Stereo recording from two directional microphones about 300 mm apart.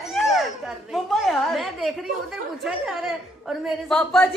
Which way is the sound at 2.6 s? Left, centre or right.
Centre.